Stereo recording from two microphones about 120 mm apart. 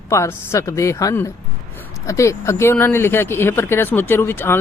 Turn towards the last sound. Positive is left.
turn(degrees=20)  # may be behind; listen again after turning